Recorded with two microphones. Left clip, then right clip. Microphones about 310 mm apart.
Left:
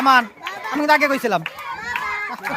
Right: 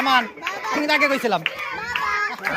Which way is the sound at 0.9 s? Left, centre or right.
Centre.